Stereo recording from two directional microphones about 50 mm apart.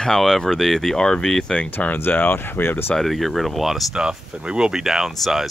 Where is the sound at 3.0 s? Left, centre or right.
Centre.